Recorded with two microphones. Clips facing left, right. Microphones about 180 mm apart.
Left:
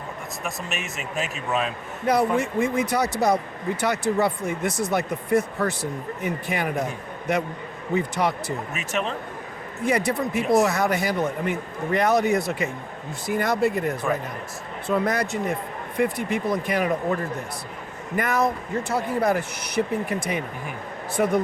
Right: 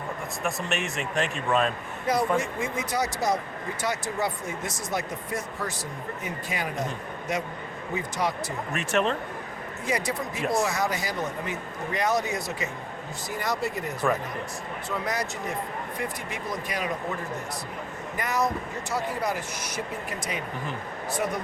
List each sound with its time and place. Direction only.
0.4 s speech: centre (ahead or behind)
2.0 s speech: 60° left (ahead or behind)
8.7 s speech: centre (ahead or behind)
9.8 s speech: 60° left (ahead or behind)
18.2 s speech: 55° left (ahead or behind)